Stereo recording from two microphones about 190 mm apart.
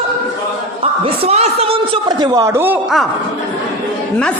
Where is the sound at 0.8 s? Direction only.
35° right (ahead or behind); by 2.7 s 15° right (ahead or behind).